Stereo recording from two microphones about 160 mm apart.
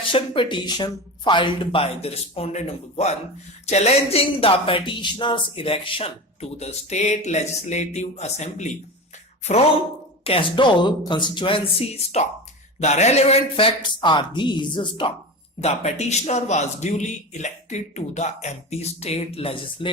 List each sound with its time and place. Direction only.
0.0 s speech: 35° left (ahead or behind)
15.6 s a man's voice: 45° left (ahead or behind)